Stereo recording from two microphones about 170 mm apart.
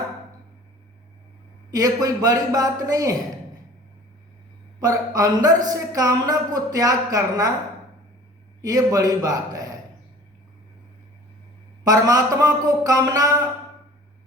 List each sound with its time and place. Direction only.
1.7 s speech: 20° right (ahead or behind)
4.8 s speech: 20° right (ahead or behind)
8.6 s speech: 20° right (ahead or behind)
11.8 s speech: 20° right (ahead or behind)